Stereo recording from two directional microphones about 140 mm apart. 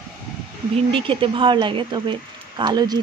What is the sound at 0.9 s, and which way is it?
Speech, 40° right (ahead or behind).